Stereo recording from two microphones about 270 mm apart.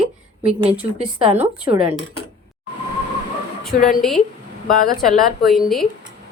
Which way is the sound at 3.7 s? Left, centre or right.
Left.